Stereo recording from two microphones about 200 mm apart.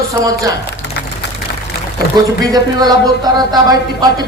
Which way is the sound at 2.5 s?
20° right (ahead or behind).